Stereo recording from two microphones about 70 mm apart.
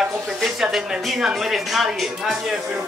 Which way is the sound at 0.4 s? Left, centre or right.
Centre.